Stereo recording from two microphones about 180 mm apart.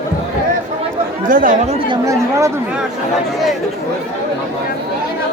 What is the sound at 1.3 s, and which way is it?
Speech, 50° right (ahead or behind).